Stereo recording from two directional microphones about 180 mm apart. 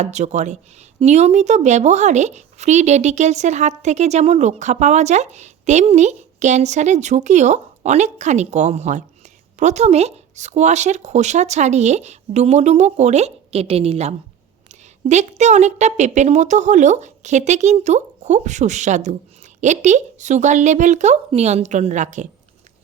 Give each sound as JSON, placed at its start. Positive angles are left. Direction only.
{"t": 0.0, "sound": "a woman's voice", "side_deg": -40}